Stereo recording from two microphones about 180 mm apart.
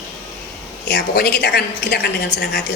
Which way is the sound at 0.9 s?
65° left (ahead or behind).